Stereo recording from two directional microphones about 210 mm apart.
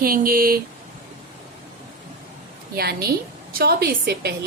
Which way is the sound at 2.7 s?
50° right (ahead or behind).